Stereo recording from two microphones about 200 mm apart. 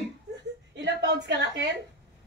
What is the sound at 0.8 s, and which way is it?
Speech, 60° right (ahead or behind).